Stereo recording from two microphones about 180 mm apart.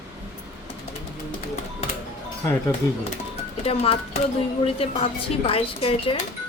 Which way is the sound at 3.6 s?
35° left (ahead or behind).